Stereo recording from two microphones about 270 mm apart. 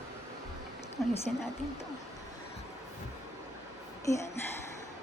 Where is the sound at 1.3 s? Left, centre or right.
Centre.